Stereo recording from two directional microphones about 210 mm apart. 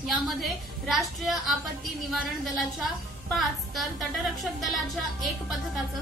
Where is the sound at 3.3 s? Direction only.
Centre (ahead or behind).